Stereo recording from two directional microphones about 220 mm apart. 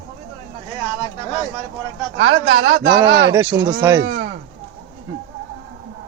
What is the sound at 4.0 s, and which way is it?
Speech, 50° right (ahead or behind).